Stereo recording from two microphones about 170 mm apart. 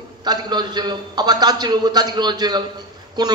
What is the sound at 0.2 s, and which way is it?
A man's voice, 25° right (ahead or behind).